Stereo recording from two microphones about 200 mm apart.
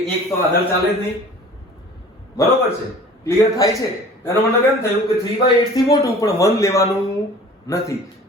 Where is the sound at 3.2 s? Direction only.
15° left (ahead or behind).